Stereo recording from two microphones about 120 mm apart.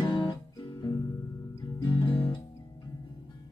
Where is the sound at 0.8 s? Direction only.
30° left (ahead or behind).